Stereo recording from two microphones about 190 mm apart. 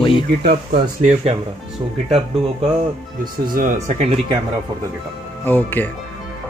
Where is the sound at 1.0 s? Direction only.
35° right (ahead or behind).